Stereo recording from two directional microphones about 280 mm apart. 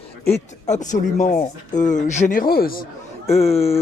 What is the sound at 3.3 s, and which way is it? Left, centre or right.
Speech, left.